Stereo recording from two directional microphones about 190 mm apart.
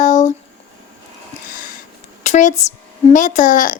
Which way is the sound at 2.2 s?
40° left (ahead or behind).